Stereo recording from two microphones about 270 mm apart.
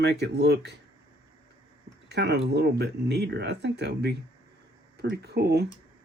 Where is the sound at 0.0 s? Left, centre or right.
Right.